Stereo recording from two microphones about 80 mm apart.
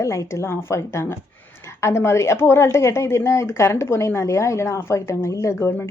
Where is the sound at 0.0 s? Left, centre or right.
Left.